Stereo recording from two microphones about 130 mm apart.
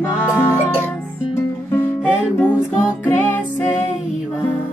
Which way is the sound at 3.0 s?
15° left (ahead or behind).